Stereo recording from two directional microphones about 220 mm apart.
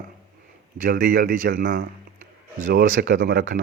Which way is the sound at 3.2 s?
55° right (ahead or behind).